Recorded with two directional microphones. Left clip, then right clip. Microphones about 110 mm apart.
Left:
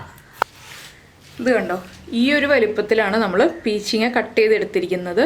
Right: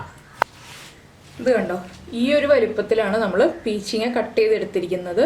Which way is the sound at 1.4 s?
30° left (ahead or behind).